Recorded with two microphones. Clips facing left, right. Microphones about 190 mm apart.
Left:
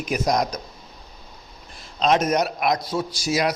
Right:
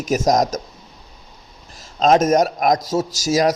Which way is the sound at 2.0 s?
45° right (ahead or behind).